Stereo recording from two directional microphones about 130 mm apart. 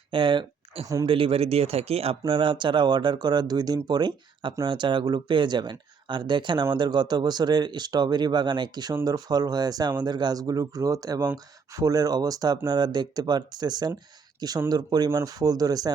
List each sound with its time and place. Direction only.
0.1 s speech: 40° right (ahead or behind)